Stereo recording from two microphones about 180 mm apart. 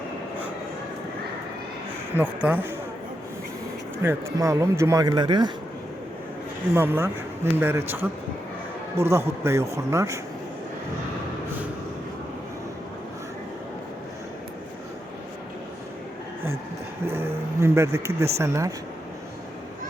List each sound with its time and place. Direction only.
2.1 s speech: 10° right (ahead or behind)
4.0 s speech: 15° right (ahead or behind)
6.7 s speech: 10° right (ahead or behind)
17.1 s speech: 15° right (ahead or behind)